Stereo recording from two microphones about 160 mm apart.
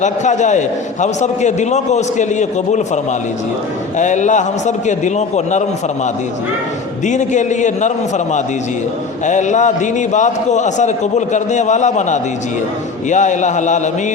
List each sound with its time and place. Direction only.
0.0 s a man's voice: 50° left (ahead or behind)
7.0 s a man's voice: 50° left (ahead or behind)